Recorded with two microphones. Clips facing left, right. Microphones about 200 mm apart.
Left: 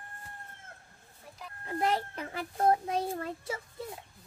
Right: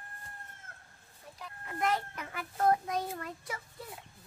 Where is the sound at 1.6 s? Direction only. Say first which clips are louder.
Left 2 dB; 30° left (ahead or behind).